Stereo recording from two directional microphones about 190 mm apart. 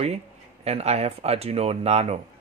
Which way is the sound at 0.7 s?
35° right (ahead or behind).